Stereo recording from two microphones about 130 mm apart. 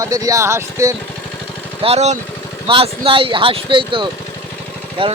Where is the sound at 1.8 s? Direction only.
55° right (ahead or behind).